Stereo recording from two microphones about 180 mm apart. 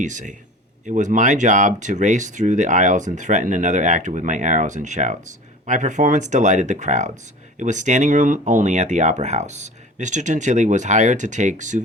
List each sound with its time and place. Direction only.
0.0 s speech: 45° right (ahead or behind)